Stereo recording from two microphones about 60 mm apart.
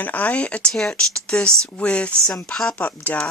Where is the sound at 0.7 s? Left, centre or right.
Centre.